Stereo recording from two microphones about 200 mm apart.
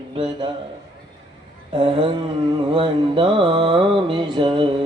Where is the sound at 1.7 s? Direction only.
25° right (ahead or behind).